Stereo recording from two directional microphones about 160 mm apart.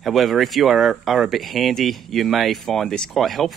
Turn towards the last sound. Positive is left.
turn(degrees=0)  # may be behind; listen again after turning